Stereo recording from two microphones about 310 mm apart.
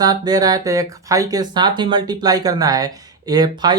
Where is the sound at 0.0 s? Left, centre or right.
Centre.